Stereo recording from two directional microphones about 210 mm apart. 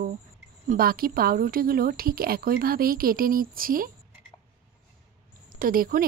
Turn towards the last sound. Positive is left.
turn(degrees=-45)  # may be behind; listen again after turning